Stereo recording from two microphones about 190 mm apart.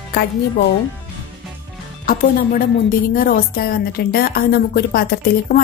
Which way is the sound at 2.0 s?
50° left (ahead or behind).